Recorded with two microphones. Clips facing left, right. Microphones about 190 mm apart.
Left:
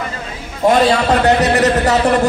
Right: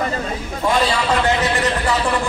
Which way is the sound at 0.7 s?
45° left (ahead or behind).